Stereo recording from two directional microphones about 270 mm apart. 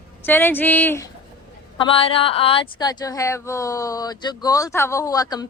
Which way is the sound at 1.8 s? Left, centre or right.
Centre.